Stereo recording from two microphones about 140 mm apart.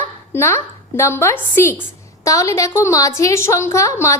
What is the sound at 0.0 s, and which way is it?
A woman's voice, 15° left (ahead or behind).